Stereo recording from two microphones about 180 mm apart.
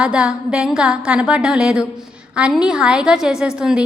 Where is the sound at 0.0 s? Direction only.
5° right (ahead or behind).